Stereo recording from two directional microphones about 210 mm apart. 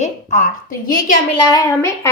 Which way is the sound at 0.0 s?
35° left (ahead or behind).